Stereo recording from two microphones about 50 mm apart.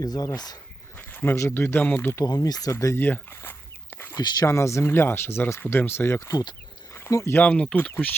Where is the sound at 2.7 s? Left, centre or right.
Left.